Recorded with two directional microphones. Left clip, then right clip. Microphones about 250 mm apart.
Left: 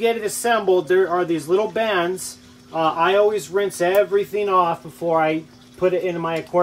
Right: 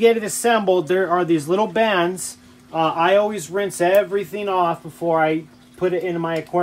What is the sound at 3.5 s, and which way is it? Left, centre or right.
Speech, right.